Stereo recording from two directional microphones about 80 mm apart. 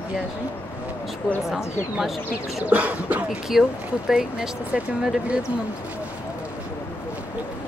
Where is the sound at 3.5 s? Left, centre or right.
Centre.